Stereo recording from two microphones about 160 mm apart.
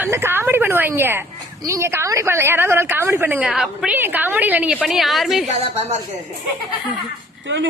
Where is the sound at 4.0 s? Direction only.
10° right (ahead or behind).